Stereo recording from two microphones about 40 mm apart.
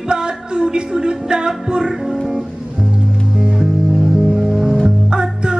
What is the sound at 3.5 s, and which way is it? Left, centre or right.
Music, centre.